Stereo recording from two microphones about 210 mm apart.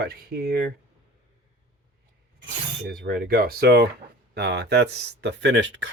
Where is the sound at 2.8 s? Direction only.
45° right (ahead or behind).